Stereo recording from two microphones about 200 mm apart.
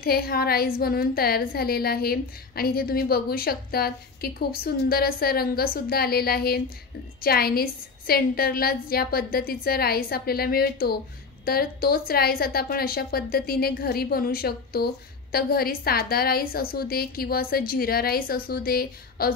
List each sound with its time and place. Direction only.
0.0 s a woman's voice: 50° left (ahead or behind)